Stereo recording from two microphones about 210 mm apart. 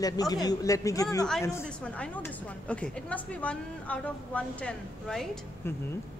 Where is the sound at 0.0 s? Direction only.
20° left (ahead or behind).